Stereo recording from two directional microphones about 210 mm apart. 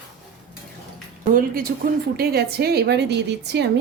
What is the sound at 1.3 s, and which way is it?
A woman's voice, 40° right (ahead or behind).